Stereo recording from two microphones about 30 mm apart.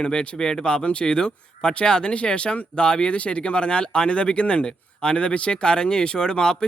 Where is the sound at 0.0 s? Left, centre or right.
Left.